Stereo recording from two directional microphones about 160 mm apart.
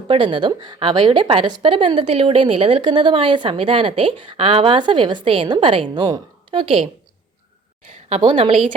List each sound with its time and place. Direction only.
0.1 s a woman's voice: 30° right (ahead or behind)
7.9 s a woman's voice: 45° right (ahead or behind)